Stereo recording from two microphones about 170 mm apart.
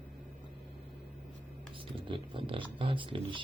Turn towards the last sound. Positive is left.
turn(degrees=-30)  # may be behind; listen again after turning